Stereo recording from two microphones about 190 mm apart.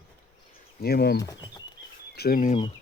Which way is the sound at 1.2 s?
20° left (ahead or behind).